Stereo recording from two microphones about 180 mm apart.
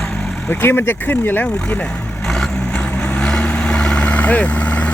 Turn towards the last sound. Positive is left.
turn(degrees=10)  # may be behind; listen again after turning